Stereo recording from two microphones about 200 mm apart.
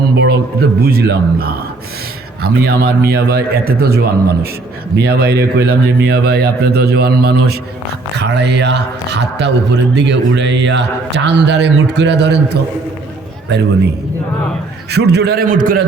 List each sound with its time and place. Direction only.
0.8 s a man's voice: 50° right (ahead or behind)
14.8 s a man's voice: 55° right (ahead or behind)